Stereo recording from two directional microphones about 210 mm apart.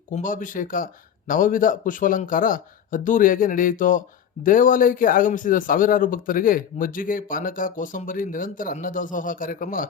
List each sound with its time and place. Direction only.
0.1 s speech: 40° left (ahead or behind)